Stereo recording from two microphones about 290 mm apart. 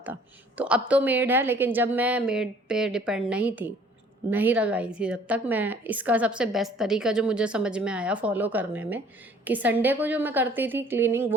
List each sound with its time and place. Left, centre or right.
0.0 s a woman's voice: centre